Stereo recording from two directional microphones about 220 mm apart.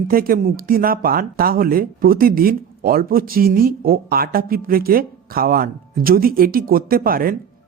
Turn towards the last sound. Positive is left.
turn(degrees=-40)  # may be behind; listen again after turning